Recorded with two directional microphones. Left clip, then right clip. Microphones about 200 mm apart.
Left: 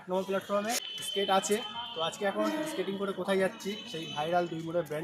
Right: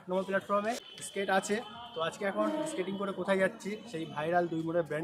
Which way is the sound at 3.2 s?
5° right (ahead or behind).